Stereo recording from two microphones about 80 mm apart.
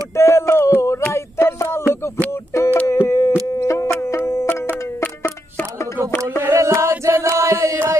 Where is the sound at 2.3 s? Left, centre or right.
Left.